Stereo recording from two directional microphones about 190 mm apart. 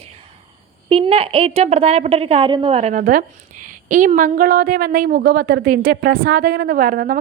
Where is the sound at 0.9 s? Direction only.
30° right (ahead or behind).